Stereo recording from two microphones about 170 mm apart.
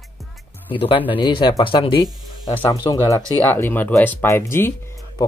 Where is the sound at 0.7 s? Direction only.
30° left (ahead or behind).